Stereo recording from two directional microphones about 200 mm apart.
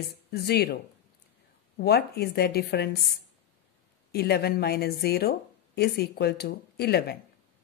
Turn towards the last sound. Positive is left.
turn(degrees=55)  # may be behind; listen again after turning